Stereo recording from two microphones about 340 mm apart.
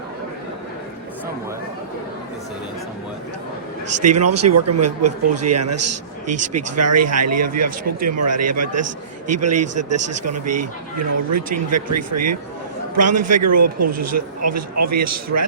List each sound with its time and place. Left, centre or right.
4.0 s a man's voice: right